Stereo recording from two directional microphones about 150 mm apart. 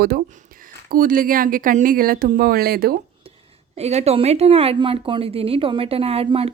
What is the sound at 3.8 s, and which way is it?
Speech, 45° right (ahead or behind).